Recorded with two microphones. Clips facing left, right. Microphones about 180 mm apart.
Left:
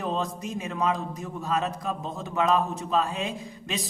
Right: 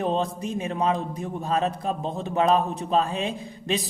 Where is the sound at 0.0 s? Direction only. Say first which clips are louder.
Right 4 dB; 30° right (ahead or behind).